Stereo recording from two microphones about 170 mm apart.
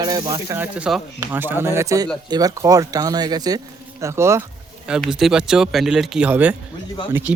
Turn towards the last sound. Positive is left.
turn(degrees=-10)  # may be behind; listen again after turning